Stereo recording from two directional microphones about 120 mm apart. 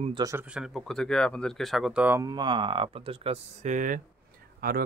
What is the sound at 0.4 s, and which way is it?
Speech, 5° right (ahead or behind).